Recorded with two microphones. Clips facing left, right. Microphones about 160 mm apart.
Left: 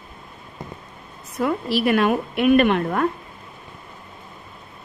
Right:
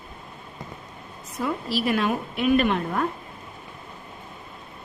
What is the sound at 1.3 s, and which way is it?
A woman's voice, 65° left (ahead or behind).